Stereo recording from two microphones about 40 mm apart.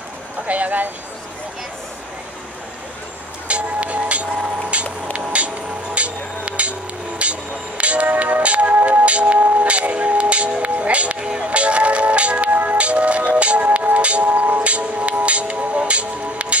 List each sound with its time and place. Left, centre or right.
0.5 s music: right
3.4 s music: right
12.4 s music: right
12.7 s music: right
14.6 s music: right